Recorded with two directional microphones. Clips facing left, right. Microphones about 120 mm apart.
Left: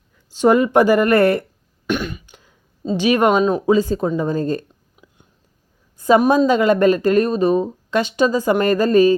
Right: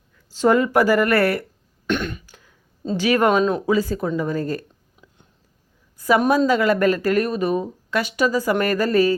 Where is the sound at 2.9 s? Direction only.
20° left (ahead or behind).